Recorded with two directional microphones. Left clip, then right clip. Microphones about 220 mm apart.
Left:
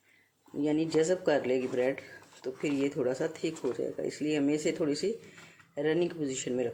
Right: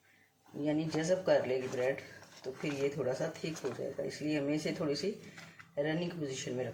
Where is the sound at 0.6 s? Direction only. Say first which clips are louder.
Left 6 dB; 50° left (ahead or behind).